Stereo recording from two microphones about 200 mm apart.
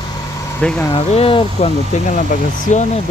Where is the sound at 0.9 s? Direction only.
30° left (ahead or behind).